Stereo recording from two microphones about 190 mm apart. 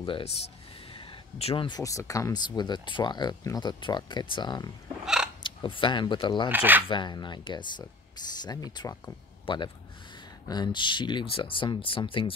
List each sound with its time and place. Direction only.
0.0 s speech: 30° left (ahead or behind)
5.0 s a sound: 5° right (ahead or behind)
5.4 s speech: 25° left (ahead or behind)
6.5 s speech: 10° right (ahead or behind)
6.9 s speech: 25° left (ahead or behind)